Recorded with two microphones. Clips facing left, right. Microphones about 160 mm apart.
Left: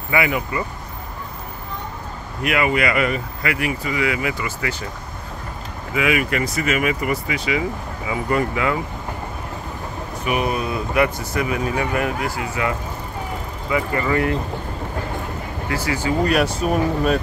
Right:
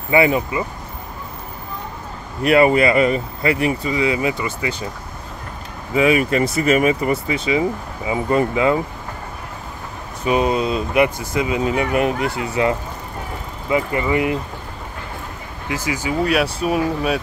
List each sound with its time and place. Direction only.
0.1 s speech: 30° right (ahead or behind)
2.4 s speech: 35° right (ahead or behind)
5.9 s speech: 30° right (ahead or behind)
10.2 s speech: 25° right (ahead or behind)
15.9 s speech: 10° right (ahead or behind)